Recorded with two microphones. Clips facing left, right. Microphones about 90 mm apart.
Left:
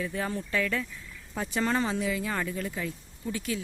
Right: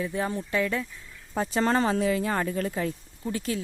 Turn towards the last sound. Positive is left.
turn(degrees=-40)  # may be behind; listen again after turning